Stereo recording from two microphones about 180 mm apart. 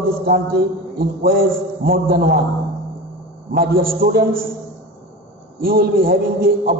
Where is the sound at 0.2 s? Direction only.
60° right (ahead or behind).